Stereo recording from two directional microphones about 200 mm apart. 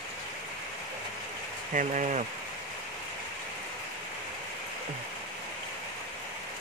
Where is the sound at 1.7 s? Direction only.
40° right (ahead or behind).